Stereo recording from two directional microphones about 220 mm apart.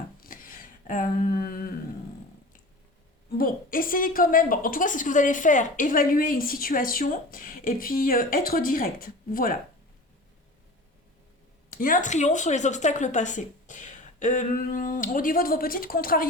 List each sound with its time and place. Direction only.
0.2 s a sound: 40° left (ahead or behind)
3.3 s a woman's voice: 40° left (ahead or behind)
11.7 s a woman's voice: 40° left (ahead or behind)